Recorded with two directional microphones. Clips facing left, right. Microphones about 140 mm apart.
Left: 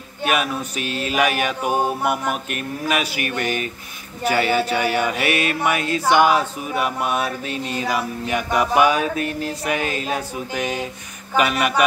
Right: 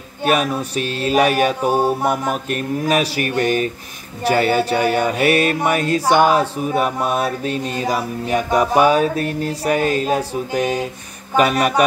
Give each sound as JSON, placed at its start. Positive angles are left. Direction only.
{"t": 0.2, "sound": "mantra", "side_deg": -40}